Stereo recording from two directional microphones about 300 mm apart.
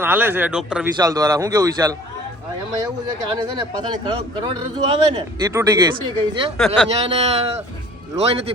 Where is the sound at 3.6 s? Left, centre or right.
Centre.